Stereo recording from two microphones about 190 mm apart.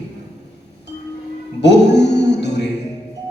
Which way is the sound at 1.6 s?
65° left (ahead or behind).